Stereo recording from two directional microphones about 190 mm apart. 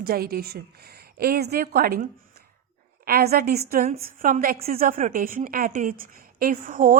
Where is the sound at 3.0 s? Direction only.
50° right (ahead or behind).